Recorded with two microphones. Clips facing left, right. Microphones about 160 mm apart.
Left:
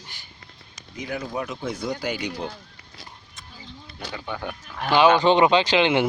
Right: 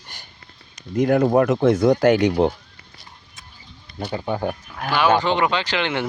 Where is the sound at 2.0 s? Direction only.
50° right (ahead or behind).